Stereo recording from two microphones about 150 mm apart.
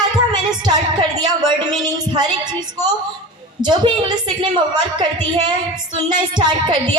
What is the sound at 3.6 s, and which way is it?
A woman's voice, 30° right (ahead or behind).